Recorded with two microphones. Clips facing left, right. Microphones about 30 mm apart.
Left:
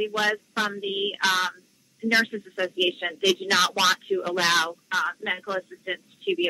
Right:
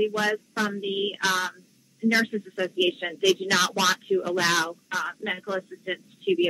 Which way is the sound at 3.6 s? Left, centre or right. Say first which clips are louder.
Left 1 dB; left.